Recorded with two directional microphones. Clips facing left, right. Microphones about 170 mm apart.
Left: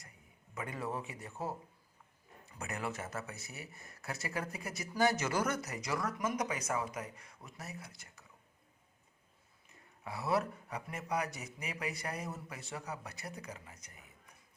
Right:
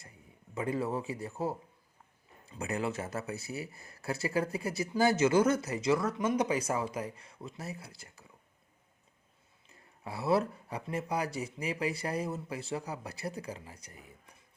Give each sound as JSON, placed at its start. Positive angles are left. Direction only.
{"t": 0.5, "sound": "speech", "side_deg": -30}
{"t": 9.6, "sound": "a man's voice", "side_deg": -30}